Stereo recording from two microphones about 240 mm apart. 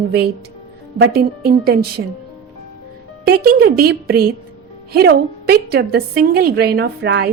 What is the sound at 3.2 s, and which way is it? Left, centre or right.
A woman's voice, right.